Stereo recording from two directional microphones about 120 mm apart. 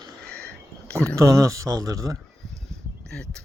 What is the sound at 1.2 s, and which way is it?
Speech, 25° right (ahead or behind).